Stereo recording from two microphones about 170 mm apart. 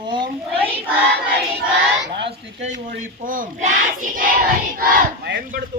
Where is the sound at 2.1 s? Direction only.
90° right.